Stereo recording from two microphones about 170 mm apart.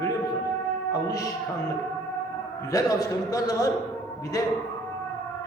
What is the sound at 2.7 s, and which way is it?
A man's voice, 20° left (ahead or behind).